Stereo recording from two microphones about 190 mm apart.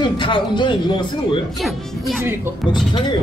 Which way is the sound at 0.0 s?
25° left (ahead or behind).